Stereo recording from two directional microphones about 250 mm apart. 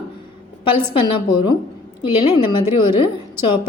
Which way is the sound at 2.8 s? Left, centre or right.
Centre.